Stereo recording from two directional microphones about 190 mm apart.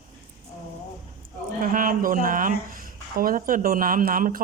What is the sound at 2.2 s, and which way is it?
Speech, 45° right (ahead or behind).